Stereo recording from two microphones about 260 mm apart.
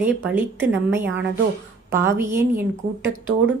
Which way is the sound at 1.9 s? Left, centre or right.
Centre.